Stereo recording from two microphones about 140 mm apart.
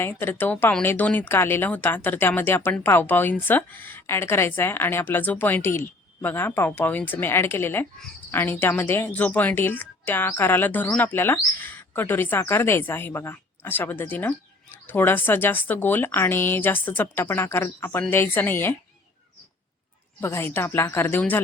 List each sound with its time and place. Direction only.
0.0 s speech: 15° left (ahead or behind)
20.2 s speech: 15° left (ahead or behind)